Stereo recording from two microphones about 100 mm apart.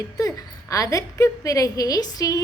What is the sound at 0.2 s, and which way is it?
A woman's voice, 35° left (ahead or behind).